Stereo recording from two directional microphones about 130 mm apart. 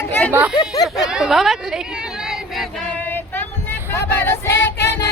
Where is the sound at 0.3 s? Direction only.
15° right (ahead or behind).